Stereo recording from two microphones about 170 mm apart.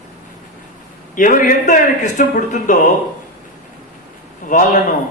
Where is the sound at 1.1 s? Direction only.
50° left (ahead or behind).